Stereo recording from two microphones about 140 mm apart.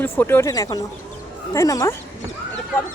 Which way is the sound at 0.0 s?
15° left (ahead or behind).